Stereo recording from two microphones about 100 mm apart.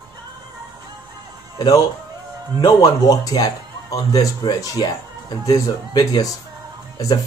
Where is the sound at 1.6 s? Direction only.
40° left (ahead or behind).